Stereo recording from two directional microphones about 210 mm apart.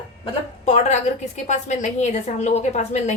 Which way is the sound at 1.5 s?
35° left (ahead or behind).